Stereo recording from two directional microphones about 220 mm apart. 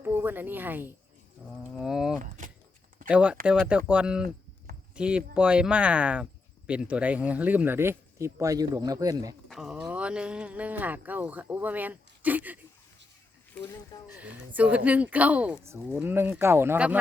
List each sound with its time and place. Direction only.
0.0 s a woman's voice: 10° right (ahead or behind)
2.2 s speech: 35° right (ahead or behind)
3.1 s speech: 5° right (ahead or behind)
9.5 s speech: centre (ahead or behind)
13.5 s speech: 10° left (ahead or behind)
14.1 s speech: 5° right (ahead or behind)